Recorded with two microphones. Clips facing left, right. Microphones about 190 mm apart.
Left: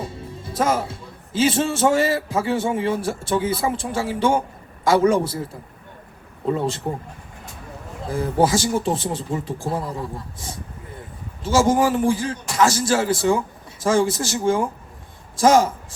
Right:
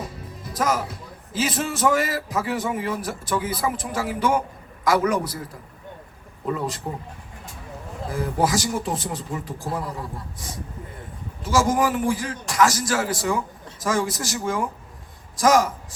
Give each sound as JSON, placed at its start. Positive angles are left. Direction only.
{"t": 0.0, "sound": "a man's voice", "side_deg": 30}
{"t": 8.1, "sound": "a man's voice", "side_deg": 25}